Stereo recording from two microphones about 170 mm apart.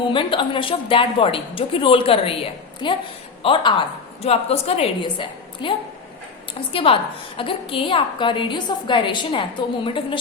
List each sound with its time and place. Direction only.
0.0 s a woman's voice: 30° left (ahead or behind)